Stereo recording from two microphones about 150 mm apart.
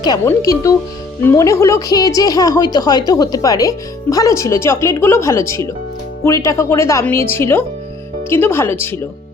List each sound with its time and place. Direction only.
0.0 s speech: 25° left (ahead or behind)